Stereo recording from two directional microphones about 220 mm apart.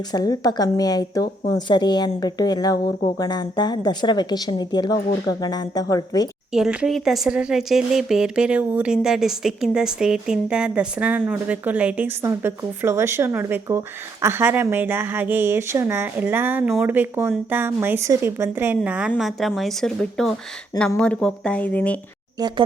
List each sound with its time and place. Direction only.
0.1 s a woman's voice: 20° left (ahead or behind)
6.5 s speech: 5° right (ahead or behind)
22.4 s speech: 20° right (ahead or behind)